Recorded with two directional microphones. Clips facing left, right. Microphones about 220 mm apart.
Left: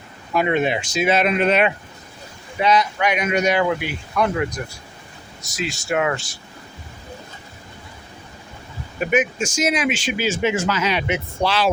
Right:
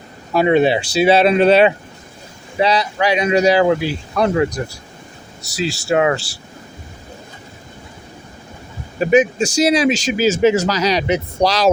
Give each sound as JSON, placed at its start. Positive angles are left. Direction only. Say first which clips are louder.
{"t": 0.3, "sound": "speech", "louder": "right 6 dB", "side_deg": -30}
{"t": 9.0, "sound": "speech", "louder": "right 7 dB", "side_deg": -30}